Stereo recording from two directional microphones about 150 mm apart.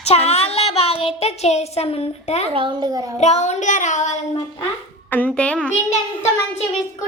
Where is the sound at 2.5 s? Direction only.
30° right (ahead or behind).